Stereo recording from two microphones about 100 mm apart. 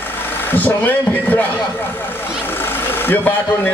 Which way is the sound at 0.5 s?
15° left (ahead or behind).